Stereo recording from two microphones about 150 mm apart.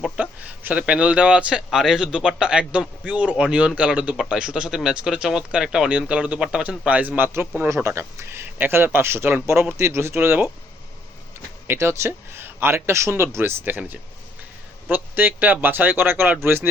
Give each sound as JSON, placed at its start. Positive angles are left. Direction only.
{"t": 0.0, "sound": "speech", "side_deg": -10}
{"t": 11.7, "sound": "speech", "side_deg": -15}